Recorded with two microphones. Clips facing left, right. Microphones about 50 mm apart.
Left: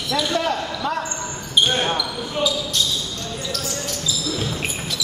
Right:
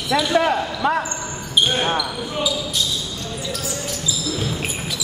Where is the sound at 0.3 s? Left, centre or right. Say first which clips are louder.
Right 5 dB; right.